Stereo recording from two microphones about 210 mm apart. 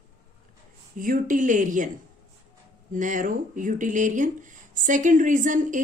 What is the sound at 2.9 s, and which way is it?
Speech, 40° right (ahead or behind).